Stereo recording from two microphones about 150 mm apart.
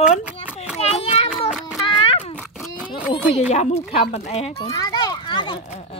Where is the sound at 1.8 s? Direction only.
35° left (ahead or behind).